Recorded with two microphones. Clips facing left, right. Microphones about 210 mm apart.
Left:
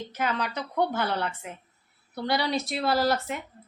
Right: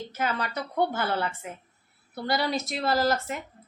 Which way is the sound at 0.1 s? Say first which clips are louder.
Left 1 dB; centre (ahead or behind).